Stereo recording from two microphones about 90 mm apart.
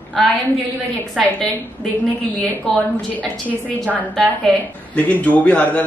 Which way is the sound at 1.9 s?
20° left (ahead or behind).